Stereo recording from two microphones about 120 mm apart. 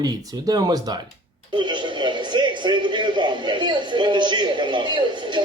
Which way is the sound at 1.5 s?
40° right (ahead or behind).